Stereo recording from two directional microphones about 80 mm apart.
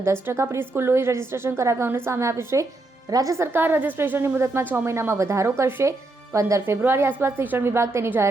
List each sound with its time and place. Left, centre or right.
0.0 s a woman's voice: right
3.3 s a woman's voice: right
6.7 s a woman's voice: right